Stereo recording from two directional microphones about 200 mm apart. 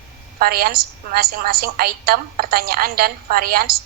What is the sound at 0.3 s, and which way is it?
A woman's voice, 50° right (ahead or behind).